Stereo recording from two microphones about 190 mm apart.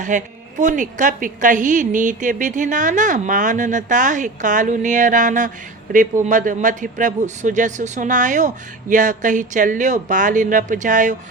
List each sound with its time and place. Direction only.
0.0 s a woman's voice: 40° right (ahead or behind)